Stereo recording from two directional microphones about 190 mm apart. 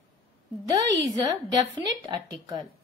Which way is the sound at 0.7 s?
20° right (ahead or behind).